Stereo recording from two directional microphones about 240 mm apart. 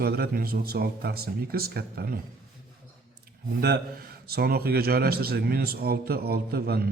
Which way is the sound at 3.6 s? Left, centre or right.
Right.